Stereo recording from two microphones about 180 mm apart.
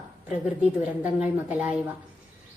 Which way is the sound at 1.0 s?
10° right (ahead or behind).